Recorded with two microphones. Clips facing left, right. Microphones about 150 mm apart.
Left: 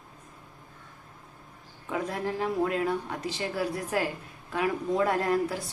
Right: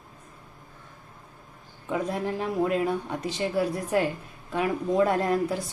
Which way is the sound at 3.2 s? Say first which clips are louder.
Right 5 dB; 25° right (ahead or behind).